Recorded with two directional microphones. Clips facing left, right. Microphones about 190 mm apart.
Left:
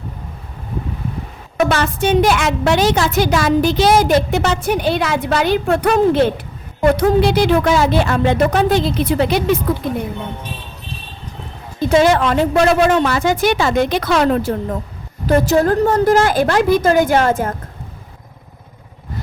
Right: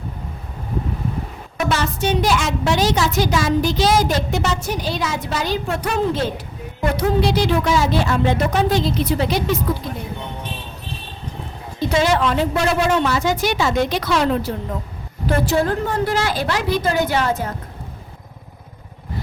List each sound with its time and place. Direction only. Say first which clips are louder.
1.5 s a woman's voice: left 5 dB; 55° left (ahead or behind)
11.9 s a woman's voice: left 5 dB; 50° left (ahead or behind)